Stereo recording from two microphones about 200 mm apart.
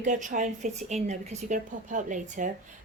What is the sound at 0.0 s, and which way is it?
A woman's voice, 40° right (ahead or behind).